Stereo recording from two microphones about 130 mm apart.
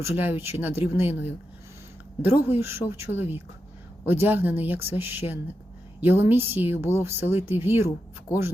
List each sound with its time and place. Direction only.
0.2 s speech: 15° right (ahead or behind)